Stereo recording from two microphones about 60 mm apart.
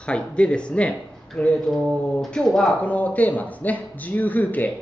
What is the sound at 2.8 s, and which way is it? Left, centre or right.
A man's voice, left.